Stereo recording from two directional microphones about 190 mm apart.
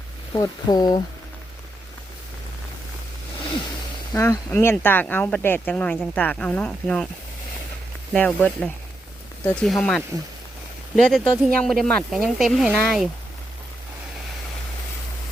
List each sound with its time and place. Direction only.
0.3 s speech: 20° left (ahead or behind)
4.1 s speech: 15° left (ahead or behind)
8.1 s speech: 10° left (ahead or behind)